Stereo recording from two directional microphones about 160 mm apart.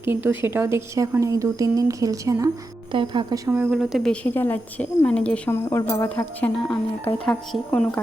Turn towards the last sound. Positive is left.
turn(degrees=5)  # may be behind; listen again after turning